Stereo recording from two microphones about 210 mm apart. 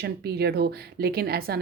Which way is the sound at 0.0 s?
50° right (ahead or behind).